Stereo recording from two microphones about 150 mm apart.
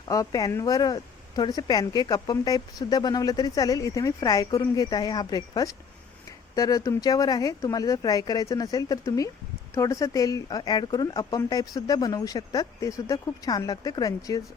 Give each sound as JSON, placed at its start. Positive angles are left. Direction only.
{"t": 0.1, "sound": "speech", "side_deg": 25}